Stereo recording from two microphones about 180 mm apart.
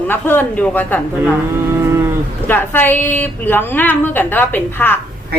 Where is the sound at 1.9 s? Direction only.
15° right (ahead or behind).